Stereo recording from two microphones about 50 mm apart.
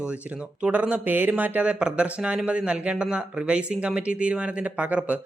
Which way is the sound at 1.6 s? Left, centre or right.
Right.